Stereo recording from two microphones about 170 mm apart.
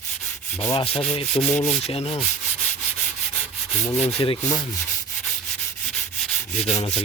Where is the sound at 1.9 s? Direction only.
35° left (ahead or behind).